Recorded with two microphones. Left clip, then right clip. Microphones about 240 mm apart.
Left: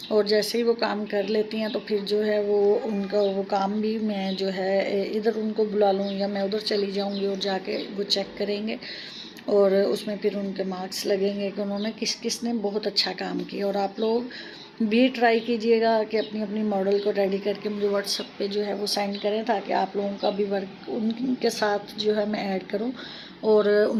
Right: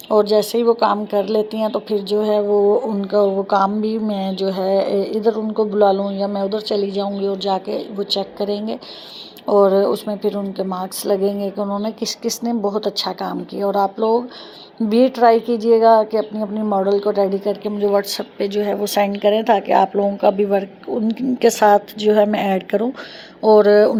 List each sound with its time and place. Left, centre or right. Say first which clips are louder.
0.3 s speech: right 7 dB; right